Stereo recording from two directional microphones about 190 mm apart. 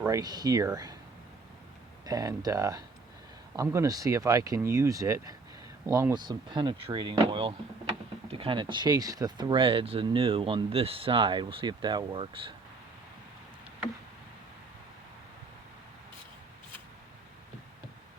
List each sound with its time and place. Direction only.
0.0 s speech: 20° right (ahead or behind)
2.0 s speech: 20° right (ahead or behind)